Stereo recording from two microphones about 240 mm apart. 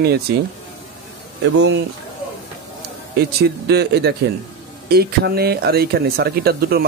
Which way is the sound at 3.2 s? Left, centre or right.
Right.